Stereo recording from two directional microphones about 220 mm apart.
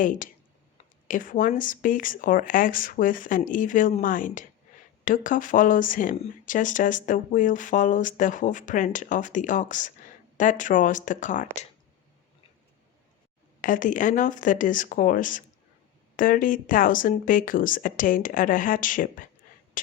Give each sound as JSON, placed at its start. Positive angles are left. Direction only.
{"t": 0.0, "sound": "speech", "side_deg": 35}
{"t": 13.6, "sound": "speech", "side_deg": 40}
{"t": 19.8, "sound": "a sound", "side_deg": 35}